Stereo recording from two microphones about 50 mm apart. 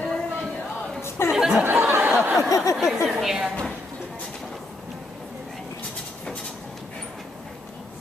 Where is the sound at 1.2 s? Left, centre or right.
Left.